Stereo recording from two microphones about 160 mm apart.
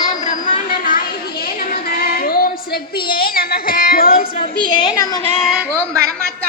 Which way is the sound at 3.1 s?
70° left (ahead or behind).